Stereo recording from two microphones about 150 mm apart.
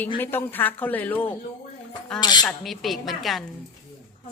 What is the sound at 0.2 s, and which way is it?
A man's voice, 15° left (ahead or behind).